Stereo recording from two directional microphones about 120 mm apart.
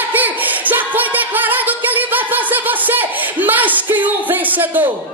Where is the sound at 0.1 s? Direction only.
15° right (ahead or behind).